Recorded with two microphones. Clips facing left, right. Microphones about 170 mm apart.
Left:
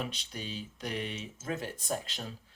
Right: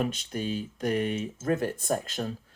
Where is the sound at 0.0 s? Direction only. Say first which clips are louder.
Right 9 dB; 50° right (ahead or behind).